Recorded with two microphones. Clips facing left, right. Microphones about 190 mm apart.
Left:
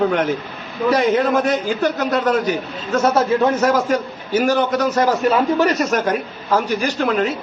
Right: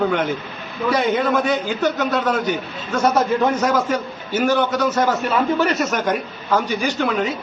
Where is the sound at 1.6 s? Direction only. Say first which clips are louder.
Left 1 dB; 5° left (ahead or behind).